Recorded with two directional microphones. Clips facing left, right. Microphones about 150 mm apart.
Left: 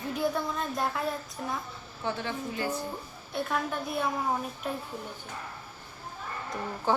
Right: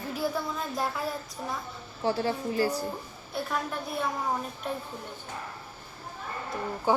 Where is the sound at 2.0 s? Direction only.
35° right (ahead or behind).